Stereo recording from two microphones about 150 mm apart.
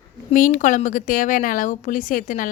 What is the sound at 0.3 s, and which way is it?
A man's voice, 60° left (ahead or behind).